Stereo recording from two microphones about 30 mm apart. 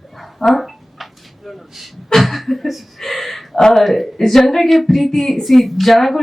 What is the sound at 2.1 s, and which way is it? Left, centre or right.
Speech, centre.